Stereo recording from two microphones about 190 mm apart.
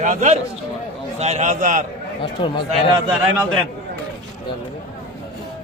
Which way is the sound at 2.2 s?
25° left (ahead or behind).